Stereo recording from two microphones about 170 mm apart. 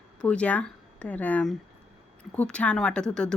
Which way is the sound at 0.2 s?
5° left (ahead or behind).